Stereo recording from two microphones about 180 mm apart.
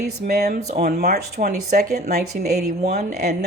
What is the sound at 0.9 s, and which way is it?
A woman's voice, 60° right (ahead or behind).